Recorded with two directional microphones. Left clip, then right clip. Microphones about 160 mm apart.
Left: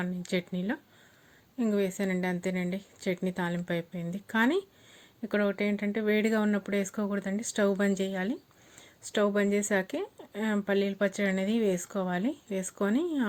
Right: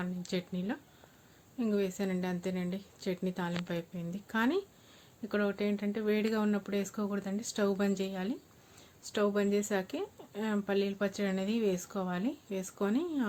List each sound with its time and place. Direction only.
0.0 s speech: 30° left (ahead or behind)